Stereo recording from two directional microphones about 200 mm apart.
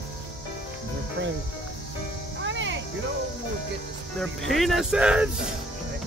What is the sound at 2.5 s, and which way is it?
Music, 65° right (ahead or behind).